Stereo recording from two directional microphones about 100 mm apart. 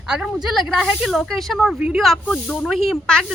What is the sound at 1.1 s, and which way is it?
Speech, 5° left (ahead or behind).